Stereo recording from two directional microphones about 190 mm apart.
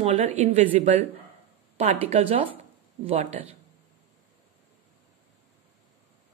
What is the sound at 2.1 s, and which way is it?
A woman's voice, 30° right (ahead or behind).